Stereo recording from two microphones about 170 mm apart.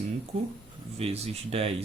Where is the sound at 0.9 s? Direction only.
35° right (ahead or behind).